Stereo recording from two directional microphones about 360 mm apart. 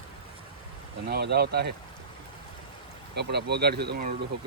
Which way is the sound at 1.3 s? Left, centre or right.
Right.